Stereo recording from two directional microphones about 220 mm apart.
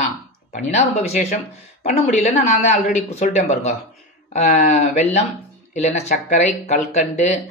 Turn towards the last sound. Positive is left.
turn(degrees=30)  # may be behind; listen again after turning